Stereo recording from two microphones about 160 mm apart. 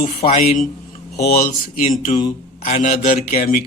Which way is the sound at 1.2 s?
70° left (ahead or behind).